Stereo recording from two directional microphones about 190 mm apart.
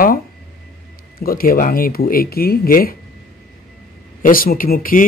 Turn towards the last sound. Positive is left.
turn(degrees=45)  # may be behind; listen again after turning